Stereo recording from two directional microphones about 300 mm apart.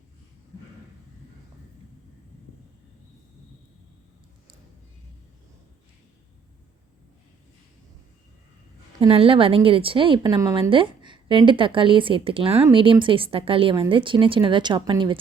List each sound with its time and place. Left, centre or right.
9.0 s speech: centre